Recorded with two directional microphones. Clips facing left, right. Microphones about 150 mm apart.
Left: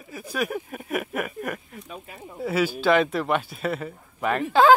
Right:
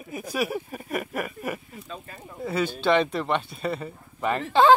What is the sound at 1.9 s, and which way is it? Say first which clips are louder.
Speech: even; 10° left (ahead or behind).